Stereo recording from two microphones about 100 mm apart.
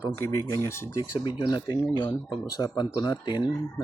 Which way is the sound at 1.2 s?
45° left (ahead or behind).